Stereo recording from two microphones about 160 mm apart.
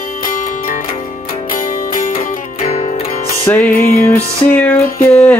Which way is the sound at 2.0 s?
60° left (ahead or behind).